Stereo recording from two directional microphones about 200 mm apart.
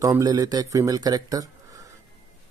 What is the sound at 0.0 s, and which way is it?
Speech, 15° right (ahead or behind).